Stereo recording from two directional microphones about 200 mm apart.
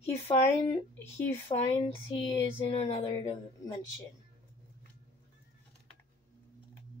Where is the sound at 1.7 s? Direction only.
25° left (ahead or behind).